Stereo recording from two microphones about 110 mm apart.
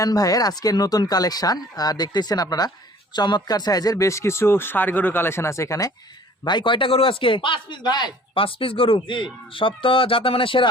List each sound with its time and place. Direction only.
0.0 s speech: 35° left (ahead or behind)
6.4 s a man's voice: 45° left (ahead or behind)